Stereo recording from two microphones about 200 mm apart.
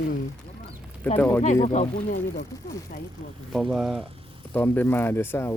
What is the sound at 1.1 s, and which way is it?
Speech, 10° left (ahead or behind).